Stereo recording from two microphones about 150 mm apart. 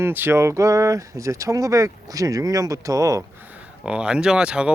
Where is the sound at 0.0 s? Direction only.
15° right (ahead or behind).